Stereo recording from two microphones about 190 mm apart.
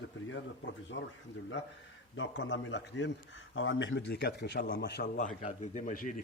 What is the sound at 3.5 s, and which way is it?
A man's voice, 90° left.